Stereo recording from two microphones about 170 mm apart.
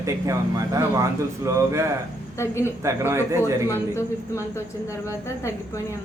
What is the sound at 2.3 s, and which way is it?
Speech, 15° left (ahead or behind).